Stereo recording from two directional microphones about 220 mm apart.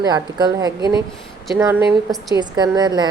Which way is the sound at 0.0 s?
20° right (ahead or behind).